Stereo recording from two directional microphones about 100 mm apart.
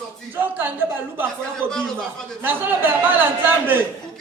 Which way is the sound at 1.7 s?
5° left (ahead or behind).